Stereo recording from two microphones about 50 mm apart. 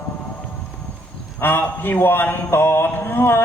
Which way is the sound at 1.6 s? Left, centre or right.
Left.